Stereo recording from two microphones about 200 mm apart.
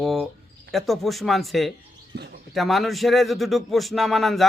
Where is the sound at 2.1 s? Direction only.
55° right (ahead or behind).